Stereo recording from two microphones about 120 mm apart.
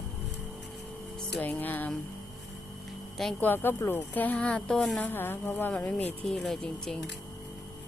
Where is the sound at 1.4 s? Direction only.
15° left (ahead or behind).